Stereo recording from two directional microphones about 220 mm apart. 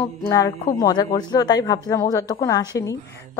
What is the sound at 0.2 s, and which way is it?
Speech, 15° left (ahead or behind).